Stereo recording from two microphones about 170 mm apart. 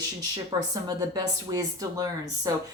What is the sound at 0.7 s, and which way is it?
Speech, 25° right (ahead or behind).